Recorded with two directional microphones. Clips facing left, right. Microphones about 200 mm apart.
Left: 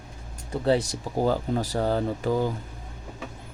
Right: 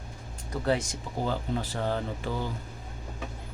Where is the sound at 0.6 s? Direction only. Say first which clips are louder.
Left 5 dB; 35° left (ahead or behind).